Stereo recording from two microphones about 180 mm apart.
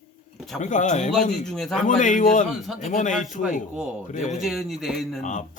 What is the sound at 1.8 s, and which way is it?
Speech, 45° left (ahead or behind).